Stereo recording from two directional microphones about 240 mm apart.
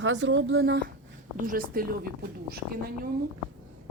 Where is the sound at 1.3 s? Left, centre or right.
Right.